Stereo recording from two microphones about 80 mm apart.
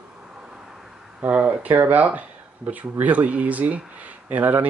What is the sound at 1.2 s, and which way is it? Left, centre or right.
Speech, centre.